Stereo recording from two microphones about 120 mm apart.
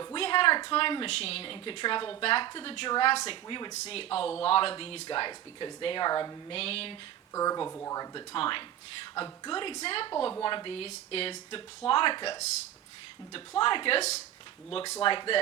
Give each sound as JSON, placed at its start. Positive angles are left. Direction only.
{"t": 0.2, "sound": "a woman's voice", "side_deg": 45}
{"t": 6.5, "sound": "a woman's voice", "side_deg": 55}
{"t": 7.3, "sound": "a woman's voice", "side_deg": 30}